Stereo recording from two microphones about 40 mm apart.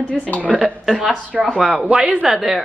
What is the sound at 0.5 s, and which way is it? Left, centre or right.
Speech, centre.